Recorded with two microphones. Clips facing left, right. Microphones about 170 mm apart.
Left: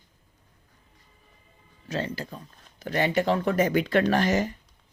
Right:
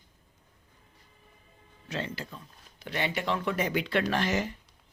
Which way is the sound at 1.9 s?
40° left (ahead or behind).